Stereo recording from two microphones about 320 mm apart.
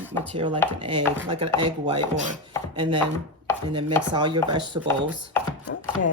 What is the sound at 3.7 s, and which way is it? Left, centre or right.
Speech, centre.